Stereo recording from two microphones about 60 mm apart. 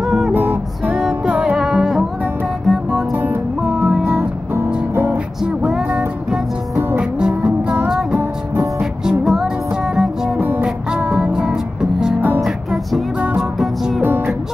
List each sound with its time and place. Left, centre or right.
0.0 s music: centre
0.3 s music: right
0.9 s music: centre
7.0 s music: centre
8.2 s music: right
9.2 s music: centre
11.5 s music: centre
13.4 s music: centre